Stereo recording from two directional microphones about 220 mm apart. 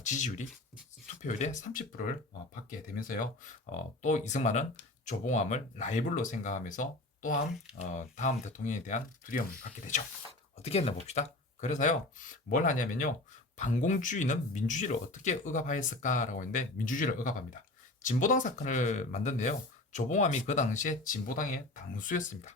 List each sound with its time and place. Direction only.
0.0 s speech: 35° left (ahead or behind)